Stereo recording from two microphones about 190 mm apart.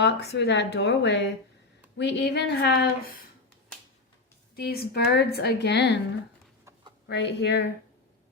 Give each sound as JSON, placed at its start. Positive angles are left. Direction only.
{"t": 0.0, "sound": "a woman's voice", "side_deg": 65}
{"t": 4.5, "sound": "a woman's voice", "side_deg": 55}
{"t": 7.1, "sound": "a woman's voice", "side_deg": 65}